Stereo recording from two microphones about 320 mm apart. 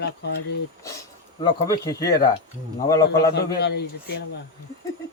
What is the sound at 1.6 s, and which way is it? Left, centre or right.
A man's voice, centre.